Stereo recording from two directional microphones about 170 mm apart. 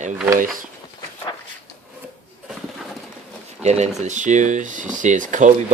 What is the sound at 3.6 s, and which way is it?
Speech, 40° right (ahead or behind).